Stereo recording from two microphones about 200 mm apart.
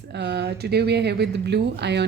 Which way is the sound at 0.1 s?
55° right (ahead or behind).